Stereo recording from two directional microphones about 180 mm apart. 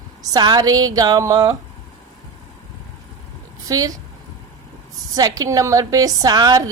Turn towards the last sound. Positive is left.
turn(degrees=-20)  # may be behind; listen again after turning